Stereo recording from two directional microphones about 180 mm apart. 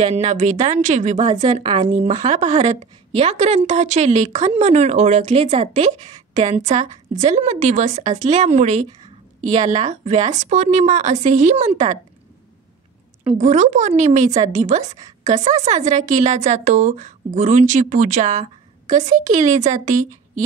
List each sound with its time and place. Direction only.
0.0 s a woman's voice: 40° right (ahead or behind)
1.6 s speech: 30° right (ahead or behind)
1.9 s a woman's voice: 40° right (ahead or behind)
13.4 s a woman's voice: 40° right (ahead or behind)